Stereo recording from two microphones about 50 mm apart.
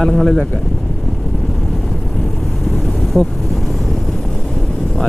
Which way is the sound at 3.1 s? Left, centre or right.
Right.